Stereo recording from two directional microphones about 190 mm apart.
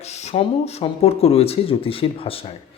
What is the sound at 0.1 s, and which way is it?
Speech, 35° left (ahead or behind).